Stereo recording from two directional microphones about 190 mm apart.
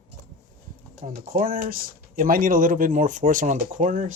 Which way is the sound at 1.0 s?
50° right (ahead or behind).